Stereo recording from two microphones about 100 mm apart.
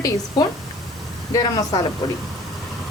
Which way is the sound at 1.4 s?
40° left (ahead or behind).